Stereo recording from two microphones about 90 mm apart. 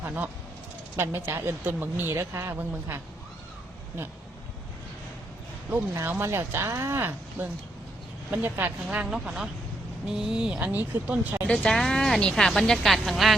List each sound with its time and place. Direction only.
0.0 s speech: 20° right (ahead or behind)
6.2 s speech: 30° right (ahead or behind)
9.0 s speech: 5° right (ahead or behind)
11.4 s a woman's voice: 10° left (ahead or behind)